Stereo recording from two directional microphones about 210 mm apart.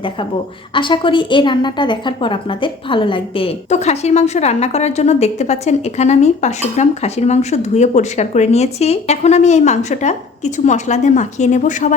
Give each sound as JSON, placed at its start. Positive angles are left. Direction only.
{"t": 0.7, "sound": "a woman's voice", "side_deg": 25}